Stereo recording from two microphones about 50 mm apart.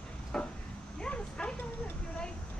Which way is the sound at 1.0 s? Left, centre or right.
Left.